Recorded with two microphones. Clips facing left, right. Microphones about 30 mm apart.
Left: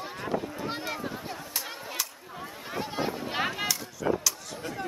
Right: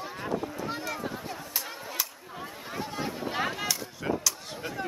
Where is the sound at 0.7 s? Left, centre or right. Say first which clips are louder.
Left 1 dB; left.